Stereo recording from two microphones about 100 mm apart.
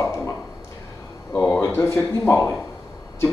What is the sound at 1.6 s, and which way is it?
Speech, 25° left (ahead or behind).